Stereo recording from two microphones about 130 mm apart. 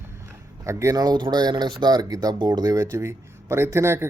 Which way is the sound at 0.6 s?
25° right (ahead or behind).